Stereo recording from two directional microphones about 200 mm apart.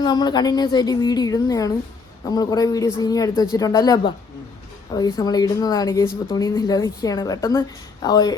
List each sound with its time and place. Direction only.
0.0 s speech: 20° left (ahead or behind)